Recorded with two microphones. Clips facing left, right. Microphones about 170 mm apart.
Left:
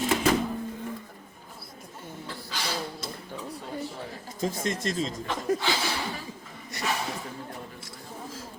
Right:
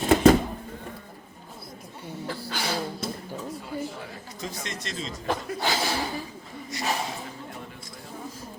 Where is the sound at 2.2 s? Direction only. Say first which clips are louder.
Right 8 dB; 60° right (ahead or behind).